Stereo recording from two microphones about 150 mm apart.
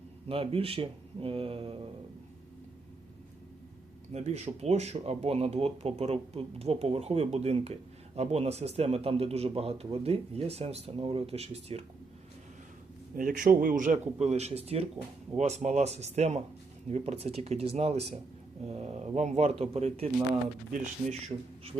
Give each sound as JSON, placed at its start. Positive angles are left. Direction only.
{"t": 0.3, "sound": "speech", "side_deg": -40}
{"t": 4.1, "sound": "speech", "side_deg": -50}
{"t": 13.1, "sound": "speech", "side_deg": -65}